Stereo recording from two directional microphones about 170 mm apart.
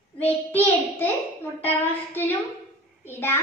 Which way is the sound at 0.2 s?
10° left (ahead or behind).